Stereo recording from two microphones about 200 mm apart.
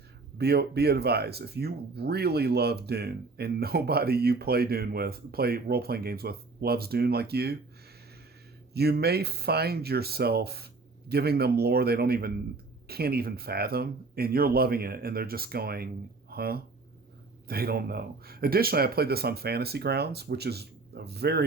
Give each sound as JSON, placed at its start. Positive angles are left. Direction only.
{"t": 0.3, "sound": "speech", "side_deg": -55}
{"t": 8.7, "sound": "speech", "side_deg": -55}